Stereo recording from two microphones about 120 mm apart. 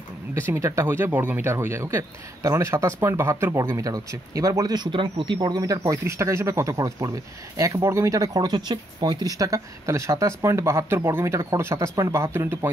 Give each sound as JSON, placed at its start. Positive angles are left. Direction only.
{"t": 0.3, "sound": "speech", "side_deg": -20}
{"t": 5.6, "sound": "speech", "side_deg": -30}